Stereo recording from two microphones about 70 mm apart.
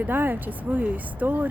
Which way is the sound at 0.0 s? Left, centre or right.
Right.